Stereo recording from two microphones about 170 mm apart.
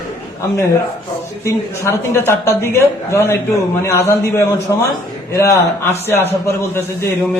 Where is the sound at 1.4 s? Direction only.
15° left (ahead or behind).